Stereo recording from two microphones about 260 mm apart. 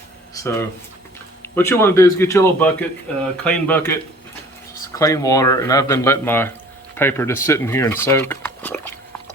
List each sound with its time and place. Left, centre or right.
0.3 s speech: centre